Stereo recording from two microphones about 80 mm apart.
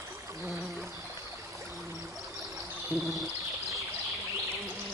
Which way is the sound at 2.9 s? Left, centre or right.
Right.